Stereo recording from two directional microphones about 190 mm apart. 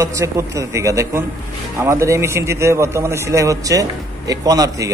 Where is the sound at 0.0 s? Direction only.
15° right (ahead or behind).